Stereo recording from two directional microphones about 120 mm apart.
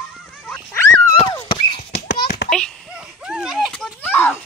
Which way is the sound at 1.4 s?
50° left (ahead or behind).